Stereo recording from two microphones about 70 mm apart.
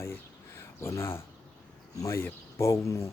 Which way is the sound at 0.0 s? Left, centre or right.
Left.